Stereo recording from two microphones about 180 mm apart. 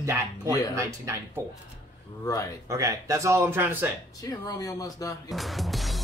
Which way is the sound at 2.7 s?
15° right (ahead or behind).